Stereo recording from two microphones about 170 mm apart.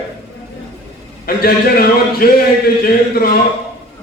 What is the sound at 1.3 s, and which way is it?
A man's voice, 60° left (ahead or behind).